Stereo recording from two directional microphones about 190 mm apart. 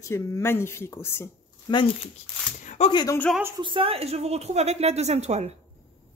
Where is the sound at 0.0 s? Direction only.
15° left (ahead or behind).